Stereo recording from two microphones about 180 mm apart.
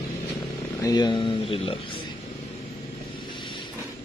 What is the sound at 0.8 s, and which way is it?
Speech, 20° left (ahead or behind).